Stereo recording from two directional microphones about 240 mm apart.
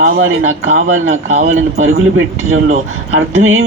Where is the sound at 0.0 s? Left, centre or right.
Right.